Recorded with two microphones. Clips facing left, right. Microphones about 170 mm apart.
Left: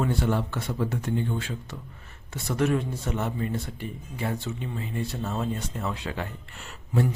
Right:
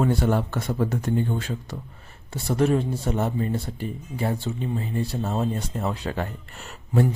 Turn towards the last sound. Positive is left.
turn(degrees=-40)  # may be behind; listen again after turning